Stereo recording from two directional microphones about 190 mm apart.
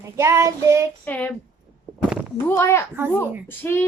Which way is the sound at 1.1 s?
10° left (ahead or behind).